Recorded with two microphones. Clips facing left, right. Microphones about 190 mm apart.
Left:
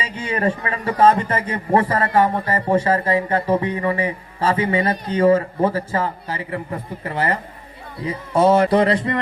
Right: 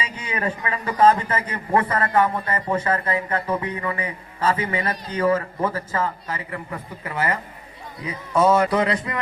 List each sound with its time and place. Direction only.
0.0 s a man's voice: 30° left (ahead or behind)